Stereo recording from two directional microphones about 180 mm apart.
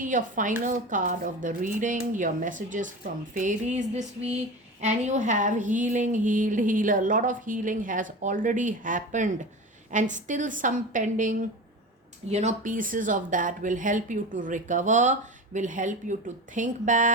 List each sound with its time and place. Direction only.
0.0 s a woman's voice: 45° right (ahead or behind)
3.3 s a sound: 45° right (ahead or behind)
4.8 s a woman's voice: 40° right (ahead or behind)